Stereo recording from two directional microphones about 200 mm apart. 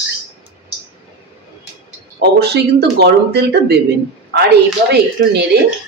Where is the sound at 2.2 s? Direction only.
55° right (ahead or behind).